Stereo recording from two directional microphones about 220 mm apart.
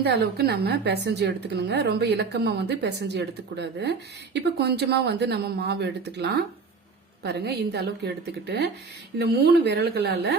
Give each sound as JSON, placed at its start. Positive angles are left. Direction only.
{"t": 0.0, "sound": "a woman's voice", "side_deg": -45}